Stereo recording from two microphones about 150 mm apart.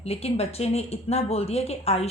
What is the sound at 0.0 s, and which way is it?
A woman's voice, 40° left (ahead or behind).